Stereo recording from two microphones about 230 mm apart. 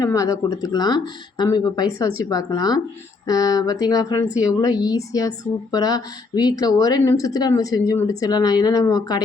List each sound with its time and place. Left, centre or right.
0.0 s speech: centre